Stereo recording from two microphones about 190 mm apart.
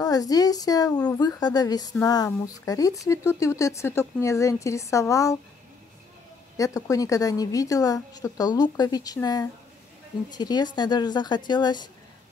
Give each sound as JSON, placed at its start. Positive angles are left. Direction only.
{"t": 0.0, "sound": "a woman's voice", "side_deg": 20}
{"t": 6.5, "sound": "a woman's voice", "side_deg": 15}